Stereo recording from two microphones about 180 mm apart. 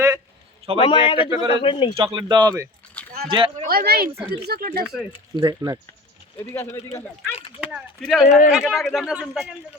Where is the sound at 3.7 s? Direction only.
60° right (ahead or behind).